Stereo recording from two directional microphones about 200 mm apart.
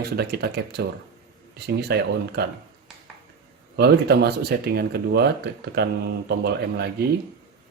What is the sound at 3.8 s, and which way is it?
Speech, 55° right (ahead or behind).